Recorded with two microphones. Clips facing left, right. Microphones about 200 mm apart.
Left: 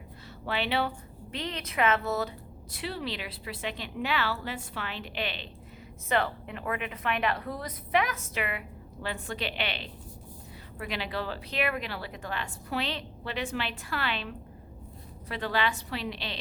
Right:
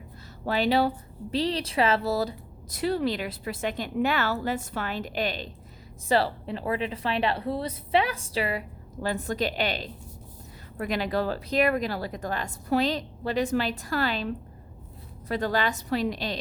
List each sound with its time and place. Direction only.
0.4 s speech: 40° right (ahead or behind)